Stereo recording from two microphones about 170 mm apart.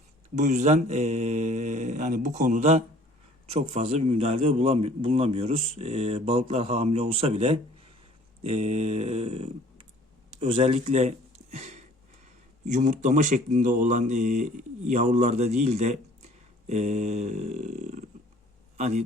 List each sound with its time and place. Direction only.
0.3 s a man's voice: 45° right (ahead or behind)
11.5 s a sound: 40° right (ahead or behind)
12.6 s a man's voice: 45° right (ahead or behind)